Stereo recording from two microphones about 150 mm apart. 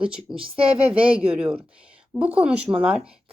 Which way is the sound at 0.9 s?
40° right (ahead or behind).